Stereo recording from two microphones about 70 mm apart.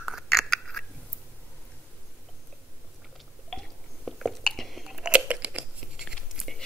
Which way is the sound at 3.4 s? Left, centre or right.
Centre.